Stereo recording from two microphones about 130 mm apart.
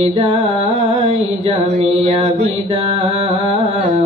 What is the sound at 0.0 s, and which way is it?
Music, 45° right (ahead or behind).